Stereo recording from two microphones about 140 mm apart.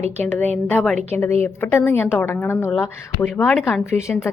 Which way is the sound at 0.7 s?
5° left (ahead or behind).